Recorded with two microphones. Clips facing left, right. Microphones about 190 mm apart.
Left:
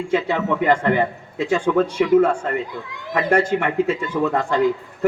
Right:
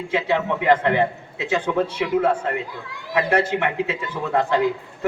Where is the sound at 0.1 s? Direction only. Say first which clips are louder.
Left 1 dB; 45° left (ahead or behind).